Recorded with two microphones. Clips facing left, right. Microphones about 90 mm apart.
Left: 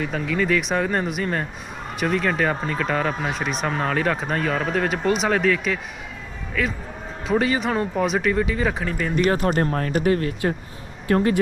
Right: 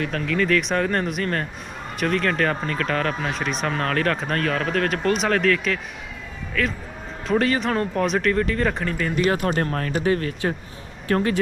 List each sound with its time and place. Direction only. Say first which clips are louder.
0.0 s speech: even; 5° left (ahead or behind)
9.3 s speech: left 2 dB; 35° left (ahead or behind)